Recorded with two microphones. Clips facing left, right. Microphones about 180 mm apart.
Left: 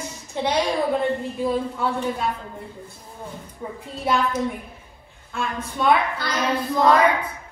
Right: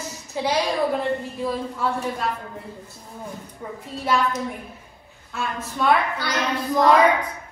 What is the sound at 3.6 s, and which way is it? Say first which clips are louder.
Speech: left 2 dB; 5° left (ahead or behind).